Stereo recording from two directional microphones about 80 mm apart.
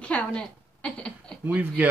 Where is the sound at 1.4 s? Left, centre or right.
Right.